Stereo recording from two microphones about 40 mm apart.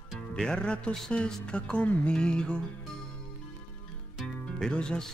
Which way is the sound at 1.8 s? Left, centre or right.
Left.